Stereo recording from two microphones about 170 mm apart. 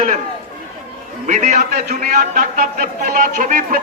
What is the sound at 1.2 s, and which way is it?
A man's voice, 45° right (ahead or behind).